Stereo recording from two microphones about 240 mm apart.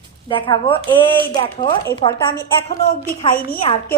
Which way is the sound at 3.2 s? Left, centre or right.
Left.